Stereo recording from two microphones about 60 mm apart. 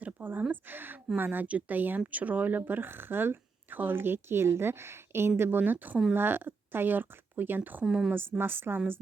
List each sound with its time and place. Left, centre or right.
0.0 s a sound: right
0.5 s speech: right
5.4 s speech: right
7.9 s speech: centre
8.1 s speech: right